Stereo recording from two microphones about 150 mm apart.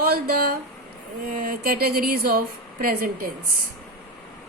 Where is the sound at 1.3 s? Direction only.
75° right (ahead or behind).